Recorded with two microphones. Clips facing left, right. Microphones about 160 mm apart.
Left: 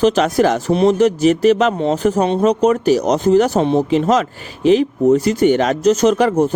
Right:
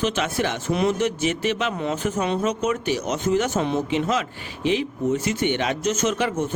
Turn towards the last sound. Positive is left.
turn(degrees=40)  # may be behind; listen again after turning